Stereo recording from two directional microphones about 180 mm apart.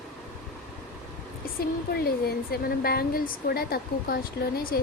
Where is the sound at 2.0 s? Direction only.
55° left (ahead or behind).